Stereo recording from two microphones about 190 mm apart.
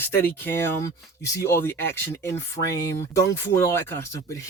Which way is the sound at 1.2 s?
15° left (ahead or behind).